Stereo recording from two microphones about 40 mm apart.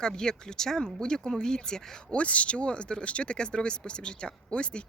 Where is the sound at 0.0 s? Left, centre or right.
Centre.